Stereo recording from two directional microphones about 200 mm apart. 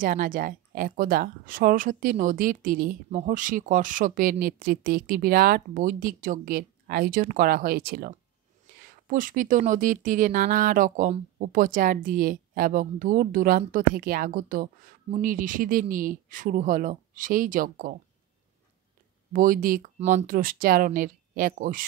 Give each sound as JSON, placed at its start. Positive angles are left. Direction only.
{"t": 0.0, "sound": "speech", "side_deg": -40}
{"t": 19.3, "sound": "speech", "side_deg": -40}